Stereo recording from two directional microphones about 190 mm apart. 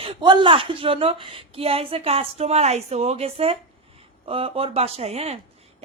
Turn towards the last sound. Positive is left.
turn(degrees=-35)  # may be behind; listen again after turning